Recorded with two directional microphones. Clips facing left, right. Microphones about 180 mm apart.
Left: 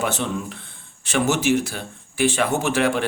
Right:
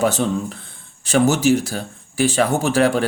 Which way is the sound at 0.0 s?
40° right (ahead or behind).